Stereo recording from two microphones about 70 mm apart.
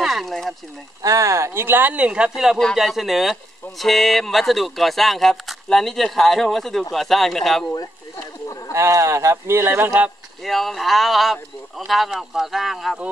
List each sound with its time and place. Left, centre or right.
0.0 s speech: centre
1.0 s speech: right
2.0 s speech: centre
8.7 s speech: right
10.4 s speech: centre